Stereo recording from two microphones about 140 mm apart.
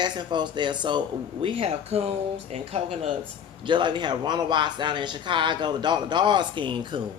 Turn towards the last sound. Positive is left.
turn(degrees=-35)  # may be behind; listen again after turning